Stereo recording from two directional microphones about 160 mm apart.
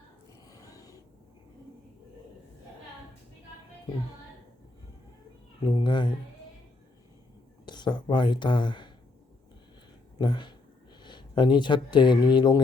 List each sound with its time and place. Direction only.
0.4 s a sound: 20° left (ahead or behind)
5.6 s speech: 30° left (ahead or behind)
7.6 s speech: 30° left (ahead or behind)
10.2 s speech: 30° left (ahead or behind)